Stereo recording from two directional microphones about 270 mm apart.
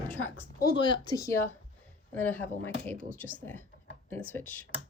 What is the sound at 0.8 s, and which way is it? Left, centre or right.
Speech, centre.